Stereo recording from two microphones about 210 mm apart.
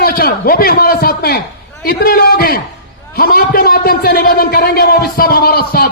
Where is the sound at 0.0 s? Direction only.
45° left (ahead or behind).